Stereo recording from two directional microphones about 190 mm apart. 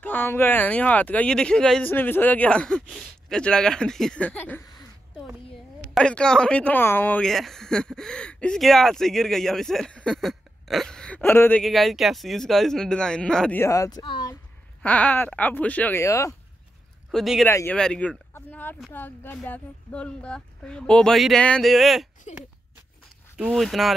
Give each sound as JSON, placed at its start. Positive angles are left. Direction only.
{"t": 0.0, "sound": "speech", "side_deg": 10}
{"t": 5.9, "sound": "speech", "side_deg": 5}
{"t": 14.8, "sound": "speech", "side_deg": 10}
{"t": 17.1, "sound": "speech", "side_deg": 0}
{"t": 17.5, "sound": "speech", "side_deg": 15}
{"t": 22.3, "sound": "speech", "side_deg": 35}
{"t": 23.3, "sound": "speech", "side_deg": 0}